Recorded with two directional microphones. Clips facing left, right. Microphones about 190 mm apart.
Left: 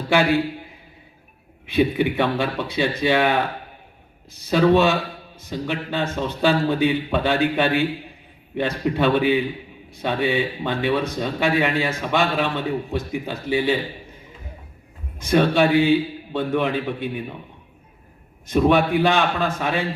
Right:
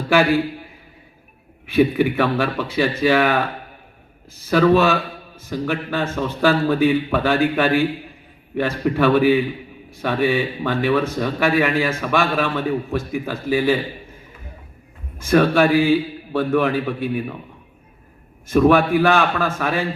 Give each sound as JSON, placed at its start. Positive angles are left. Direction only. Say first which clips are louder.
{"t": 0.1, "sound": "speech", "louder": "right 2 dB", "side_deg": 20}
{"t": 1.6, "sound": "speech", "louder": "right 3 dB", "side_deg": 20}
{"t": 15.2, "sound": "speech", "louder": "right 2 dB", "side_deg": 20}
{"t": 18.4, "sound": "speech", "louder": "right 3 dB", "side_deg": 20}